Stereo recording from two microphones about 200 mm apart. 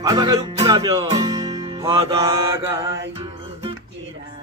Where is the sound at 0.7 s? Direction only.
20° right (ahead or behind).